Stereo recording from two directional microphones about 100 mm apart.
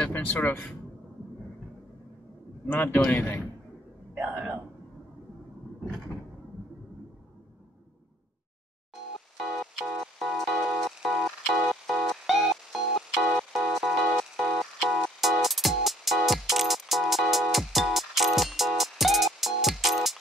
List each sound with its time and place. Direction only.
0.0 s a man's voice: 15° left (ahead or behind)
2.7 s a man's voice: 20° left (ahead or behind)
4.2 s a man's voice: 10° right (ahead or behind)
9.4 s music: centre (ahead or behind)